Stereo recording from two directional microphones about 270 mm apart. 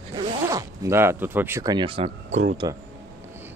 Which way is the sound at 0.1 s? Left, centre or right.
Centre.